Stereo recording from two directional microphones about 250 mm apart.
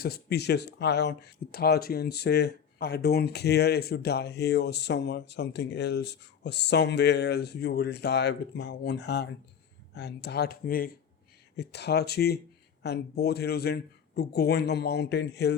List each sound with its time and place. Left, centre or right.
0.0 s speech: left